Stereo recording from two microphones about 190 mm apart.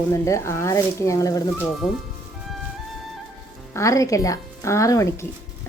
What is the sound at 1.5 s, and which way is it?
Speech, centre (ahead or behind).